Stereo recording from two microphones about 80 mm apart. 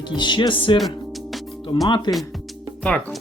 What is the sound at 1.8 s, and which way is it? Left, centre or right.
Speech, left.